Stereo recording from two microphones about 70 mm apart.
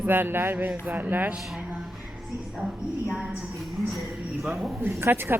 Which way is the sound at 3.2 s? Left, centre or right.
Right.